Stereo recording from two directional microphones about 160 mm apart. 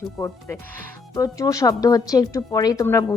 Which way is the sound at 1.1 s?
20° left (ahead or behind).